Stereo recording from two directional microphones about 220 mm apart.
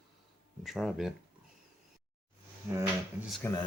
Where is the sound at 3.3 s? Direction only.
Centre (ahead or behind).